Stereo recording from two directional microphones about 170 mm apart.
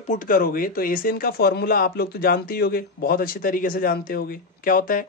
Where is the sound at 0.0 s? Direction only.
50° left (ahead or behind).